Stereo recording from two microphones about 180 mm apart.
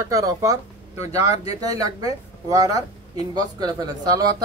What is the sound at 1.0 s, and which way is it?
Speech, 35° left (ahead or behind).